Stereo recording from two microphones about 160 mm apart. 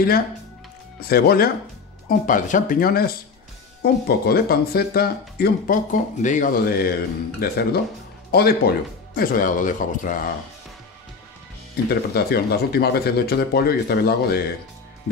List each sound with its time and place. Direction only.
1.0 s speech: 75° left (ahead or behind)
2.0 s speech: 55° left (ahead or behind)
6.6 s speech: 70° left (ahead or behind)
9.1 s speech: 60° left (ahead or behind)
11.7 s speech: 80° left